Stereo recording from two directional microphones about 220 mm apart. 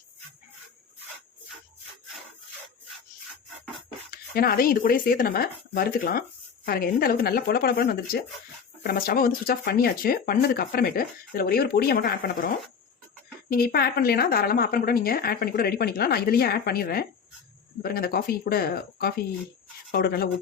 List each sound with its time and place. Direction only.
4.1 s speech: 40° left (ahead or behind)
13.5 s speech: 40° left (ahead or behind)